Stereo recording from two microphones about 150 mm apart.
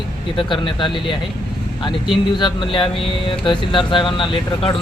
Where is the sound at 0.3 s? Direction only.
35° left (ahead or behind).